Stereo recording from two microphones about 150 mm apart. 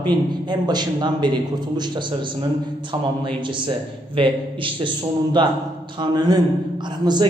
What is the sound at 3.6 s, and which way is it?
A man's voice, 35° right (ahead or behind).